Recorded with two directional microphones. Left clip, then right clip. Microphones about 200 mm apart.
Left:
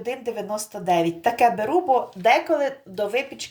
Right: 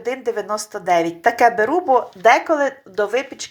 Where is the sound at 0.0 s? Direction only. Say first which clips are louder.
Right 5 dB; 10° right (ahead or behind).